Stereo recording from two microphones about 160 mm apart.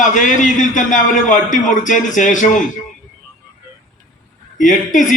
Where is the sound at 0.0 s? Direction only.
50° left (ahead or behind).